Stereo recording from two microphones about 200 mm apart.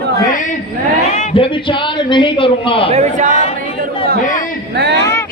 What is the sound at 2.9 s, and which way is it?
Speech, 35° right (ahead or behind).